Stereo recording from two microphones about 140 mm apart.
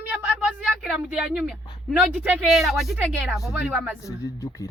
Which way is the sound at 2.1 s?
5° right (ahead or behind).